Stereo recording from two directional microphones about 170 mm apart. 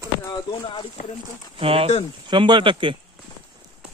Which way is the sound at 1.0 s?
45° left (ahead or behind).